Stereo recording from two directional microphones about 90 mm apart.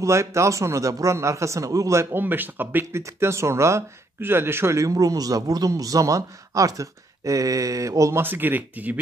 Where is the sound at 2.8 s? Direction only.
30° right (ahead or behind).